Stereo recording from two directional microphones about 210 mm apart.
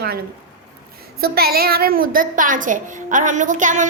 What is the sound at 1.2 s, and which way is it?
A child's voice, 45° right (ahead or behind).